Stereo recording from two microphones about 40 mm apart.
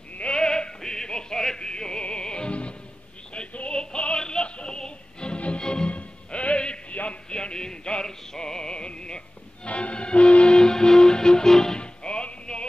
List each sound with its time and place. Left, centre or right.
0.1 s a sound: left
0.4 s music: centre
5.9 s music: left; by 11.8 s centre
11.8 s music: left